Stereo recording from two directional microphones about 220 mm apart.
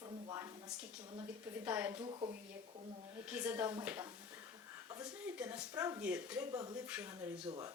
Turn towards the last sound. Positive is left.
turn(degrees=-20)  # may be behind; listen again after turning